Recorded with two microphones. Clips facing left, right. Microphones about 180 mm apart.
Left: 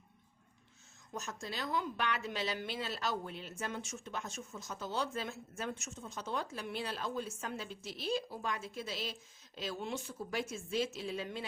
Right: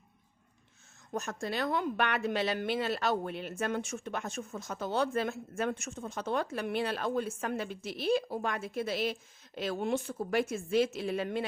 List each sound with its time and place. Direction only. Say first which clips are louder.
1.1 s a woman's voice: right 8 dB; 60° right (ahead or behind)